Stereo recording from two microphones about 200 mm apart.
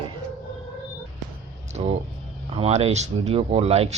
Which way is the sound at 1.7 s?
35° right (ahead or behind).